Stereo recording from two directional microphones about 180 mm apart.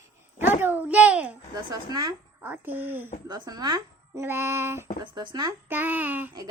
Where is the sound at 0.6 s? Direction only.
10° right (ahead or behind).